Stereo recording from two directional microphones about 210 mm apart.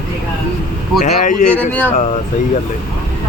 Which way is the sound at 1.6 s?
5° left (ahead or behind).